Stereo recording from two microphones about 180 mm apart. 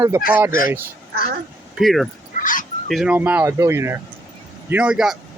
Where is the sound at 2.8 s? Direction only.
Centre (ahead or behind).